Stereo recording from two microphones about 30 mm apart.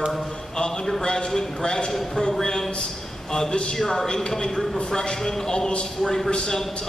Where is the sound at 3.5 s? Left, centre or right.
Left.